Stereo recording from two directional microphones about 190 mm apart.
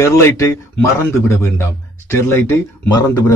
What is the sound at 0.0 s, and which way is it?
Speech, 15° left (ahead or behind).